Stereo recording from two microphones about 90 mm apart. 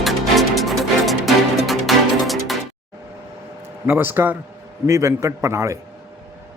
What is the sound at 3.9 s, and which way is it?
A man's voice, 25° right (ahead or behind).